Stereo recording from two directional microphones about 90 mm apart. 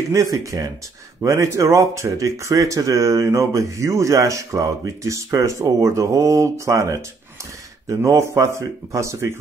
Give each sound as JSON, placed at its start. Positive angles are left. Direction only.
{"t": 0.1, "sound": "speech", "side_deg": -35}